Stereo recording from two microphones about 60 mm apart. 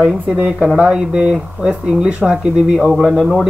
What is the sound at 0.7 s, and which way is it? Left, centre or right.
Speech, centre.